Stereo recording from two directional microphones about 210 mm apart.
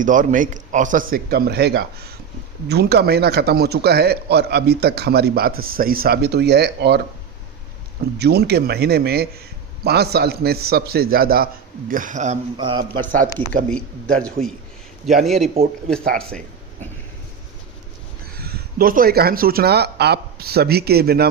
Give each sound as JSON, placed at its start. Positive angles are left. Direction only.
{"t": 0.0, "sound": "a man's voice", "side_deg": -40}
{"t": 8.2, "sound": "a man's voice", "side_deg": -50}
{"t": 12.5, "sound": "a man's voice", "side_deg": -25}
{"t": 13.1, "sound": "a man's voice", "side_deg": -40}
{"t": 13.7, "sound": "a man's voice", "side_deg": 5}
{"t": 18.3, "sound": "speech", "side_deg": -45}